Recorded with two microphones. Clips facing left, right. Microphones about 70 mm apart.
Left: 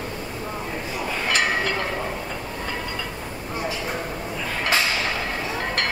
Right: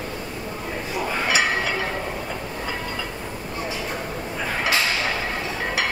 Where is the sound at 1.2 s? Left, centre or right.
Centre.